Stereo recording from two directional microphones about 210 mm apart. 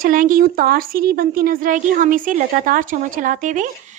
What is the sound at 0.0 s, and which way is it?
Speech, 40° right (ahead or behind).